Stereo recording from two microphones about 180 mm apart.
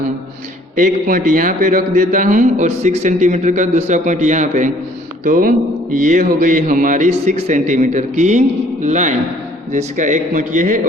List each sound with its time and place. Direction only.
0.8 s a man's voice: 50° right (ahead or behind)